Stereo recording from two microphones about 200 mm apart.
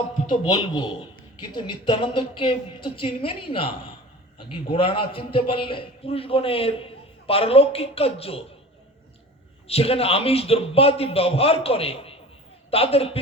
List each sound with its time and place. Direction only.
0.4 s a man's voice: 20° left (ahead or behind)
9.6 s a man's voice: 30° left (ahead or behind)